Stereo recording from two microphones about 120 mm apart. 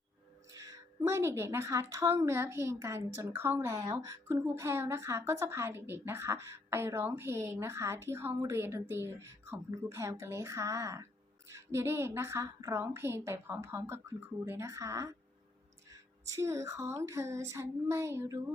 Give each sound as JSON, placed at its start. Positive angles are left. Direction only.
{"t": 0.5, "sound": "a woman's voice", "side_deg": -30}